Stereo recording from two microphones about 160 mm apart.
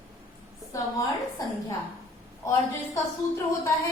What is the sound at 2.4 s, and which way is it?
A woman's voice, 20° left (ahead or behind).